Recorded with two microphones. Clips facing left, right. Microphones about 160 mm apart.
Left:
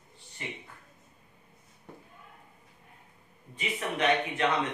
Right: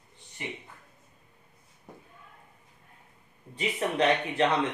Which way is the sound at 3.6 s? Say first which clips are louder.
Right 4 dB; 30° right (ahead or behind).